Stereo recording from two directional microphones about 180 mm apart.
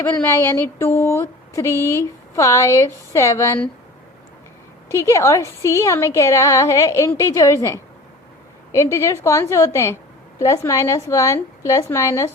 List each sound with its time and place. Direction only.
0.4 s a woman's voice: 15° left (ahead or behind)
4.9 s a woman's voice: 15° left (ahead or behind)